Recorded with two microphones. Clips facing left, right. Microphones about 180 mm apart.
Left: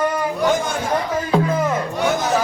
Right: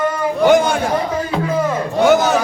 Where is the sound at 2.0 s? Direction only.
70° right (ahead or behind).